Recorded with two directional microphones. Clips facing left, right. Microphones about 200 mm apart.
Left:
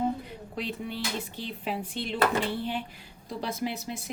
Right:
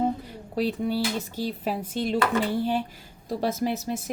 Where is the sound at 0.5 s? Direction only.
40° right (ahead or behind).